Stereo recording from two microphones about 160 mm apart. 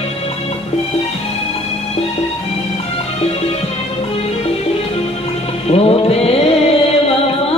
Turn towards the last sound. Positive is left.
turn(degrees=40)  # may be behind; listen again after turning